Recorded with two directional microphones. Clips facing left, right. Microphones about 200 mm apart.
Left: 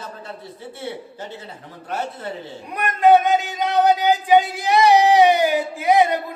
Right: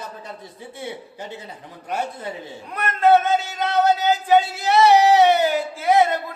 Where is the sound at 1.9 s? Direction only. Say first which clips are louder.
Even; 15° right (ahead or behind).